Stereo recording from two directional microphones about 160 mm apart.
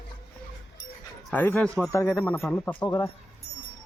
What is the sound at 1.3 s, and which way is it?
Speech, 10° left (ahead or behind).